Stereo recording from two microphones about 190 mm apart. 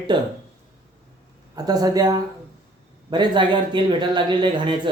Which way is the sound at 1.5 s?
20° right (ahead or behind).